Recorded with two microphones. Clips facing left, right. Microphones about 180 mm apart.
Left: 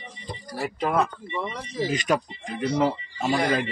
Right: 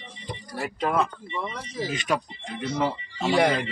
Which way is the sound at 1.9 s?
40° left (ahead or behind).